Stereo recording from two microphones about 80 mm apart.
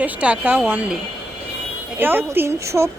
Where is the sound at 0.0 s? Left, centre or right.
Centre.